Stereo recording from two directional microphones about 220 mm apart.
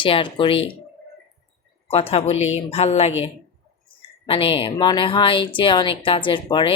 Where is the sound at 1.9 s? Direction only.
25° left (ahead or behind).